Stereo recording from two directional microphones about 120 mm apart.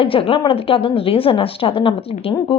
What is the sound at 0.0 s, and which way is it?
Speech, 50° left (ahead or behind).